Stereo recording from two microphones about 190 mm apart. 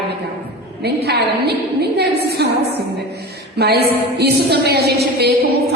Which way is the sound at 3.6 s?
60° right (ahead or behind).